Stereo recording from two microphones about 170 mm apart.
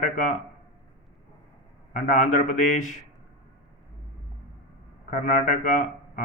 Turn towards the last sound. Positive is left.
turn(degrees=50)  # may be behind; listen again after turning